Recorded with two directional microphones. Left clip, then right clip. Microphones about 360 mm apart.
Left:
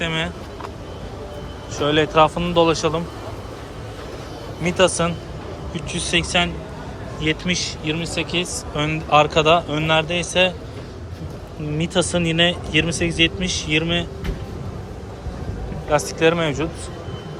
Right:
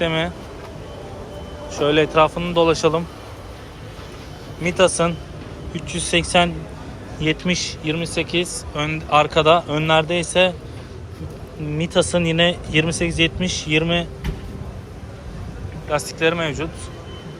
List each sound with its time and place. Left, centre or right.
0.0 s speech: centre
1.8 s speech: centre
4.8 s speech: centre
11.8 s speech: centre
15.9 s speech: centre